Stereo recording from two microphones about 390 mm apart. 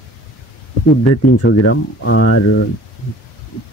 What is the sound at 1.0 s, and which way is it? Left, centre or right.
Speech, left.